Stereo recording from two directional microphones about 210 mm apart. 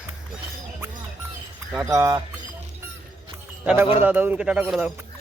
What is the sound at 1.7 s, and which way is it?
Speech, 10° right (ahead or behind).